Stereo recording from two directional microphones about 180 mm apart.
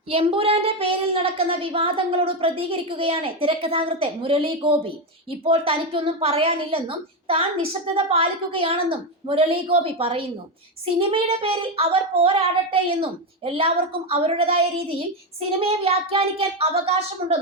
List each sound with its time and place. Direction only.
0.1 s a woman's voice: 30° right (ahead or behind)